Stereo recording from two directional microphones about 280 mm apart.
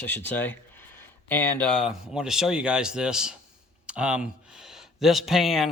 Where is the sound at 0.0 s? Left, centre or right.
Centre.